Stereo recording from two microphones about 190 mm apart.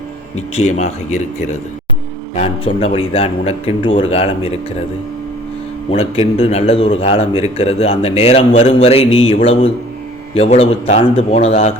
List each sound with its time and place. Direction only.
0.5 s a man's voice: 35° left (ahead or behind)
5.9 s a man's voice: 30° left (ahead or behind)